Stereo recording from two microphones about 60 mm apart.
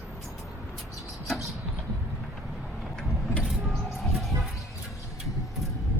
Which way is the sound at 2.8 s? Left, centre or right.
Centre.